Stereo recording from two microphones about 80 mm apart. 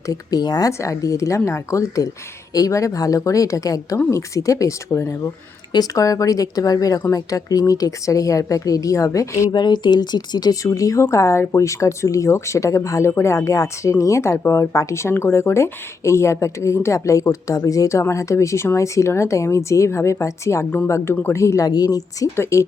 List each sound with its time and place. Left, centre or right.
0.1 s speech: left
0.7 s a woman's voice: left
5.7 s a woman's voice: left
9.5 s speech: left
21.7 s a woman's voice: left